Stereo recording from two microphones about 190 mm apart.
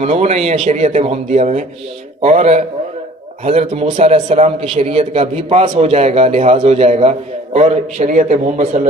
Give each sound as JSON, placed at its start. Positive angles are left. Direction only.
{"t": 0.0, "sound": "a man's voice", "side_deg": -35}